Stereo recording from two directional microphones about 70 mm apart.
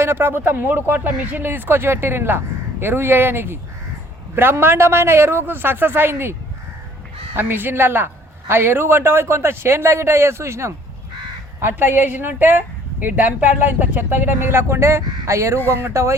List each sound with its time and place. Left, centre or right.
0.0 s a man's voice: right
7.3 s a man's voice: right